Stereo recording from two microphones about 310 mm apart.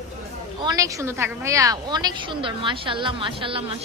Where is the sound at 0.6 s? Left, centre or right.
Centre.